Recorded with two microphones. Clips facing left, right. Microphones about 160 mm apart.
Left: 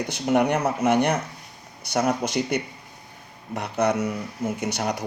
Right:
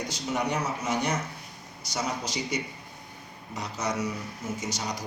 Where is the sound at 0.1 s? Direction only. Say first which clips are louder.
Left 10 dB; 60° left (ahead or behind).